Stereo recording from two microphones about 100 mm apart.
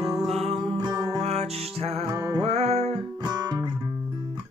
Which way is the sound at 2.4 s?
90° right.